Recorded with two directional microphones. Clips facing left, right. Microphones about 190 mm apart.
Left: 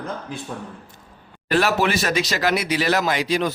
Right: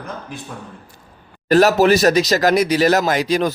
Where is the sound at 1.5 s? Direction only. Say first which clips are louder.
Right 7 dB; 40° right (ahead or behind).